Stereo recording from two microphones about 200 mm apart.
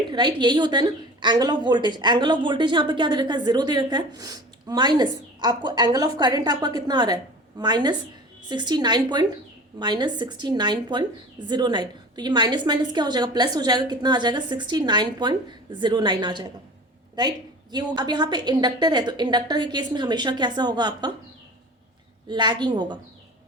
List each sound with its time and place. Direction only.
0.1 s a woman's voice: 25° right (ahead or behind)
22.3 s a woman's voice: 20° right (ahead or behind)